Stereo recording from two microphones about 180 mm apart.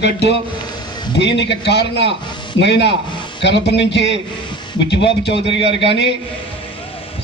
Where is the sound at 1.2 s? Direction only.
75° left (ahead or behind).